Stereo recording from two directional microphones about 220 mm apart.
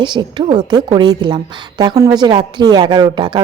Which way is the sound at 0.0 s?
20° right (ahead or behind).